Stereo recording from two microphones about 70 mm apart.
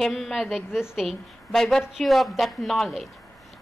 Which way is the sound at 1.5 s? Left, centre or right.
Centre.